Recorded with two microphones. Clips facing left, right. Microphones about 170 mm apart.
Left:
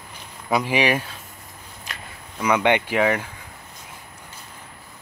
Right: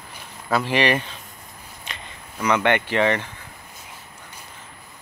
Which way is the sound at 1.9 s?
Centre (ahead or behind).